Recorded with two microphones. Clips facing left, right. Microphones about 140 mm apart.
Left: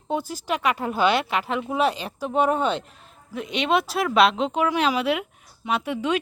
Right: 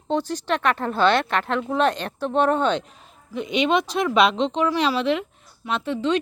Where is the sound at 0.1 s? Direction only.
10° left (ahead or behind).